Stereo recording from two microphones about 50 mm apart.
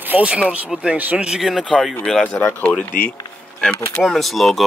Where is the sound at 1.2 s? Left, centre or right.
Centre.